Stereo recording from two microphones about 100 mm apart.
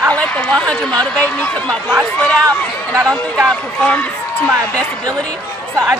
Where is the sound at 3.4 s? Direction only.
10° left (ahead or behind).